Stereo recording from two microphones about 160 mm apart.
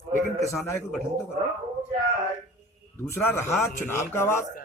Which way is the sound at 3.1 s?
15° left (ahead or behind).